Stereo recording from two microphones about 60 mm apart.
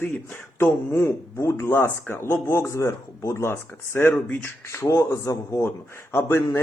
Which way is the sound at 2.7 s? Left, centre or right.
Left.